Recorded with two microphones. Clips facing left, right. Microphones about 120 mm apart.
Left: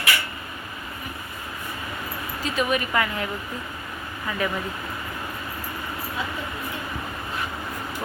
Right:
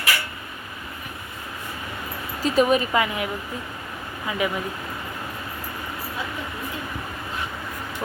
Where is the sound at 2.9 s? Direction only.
15° right (ahead or behind).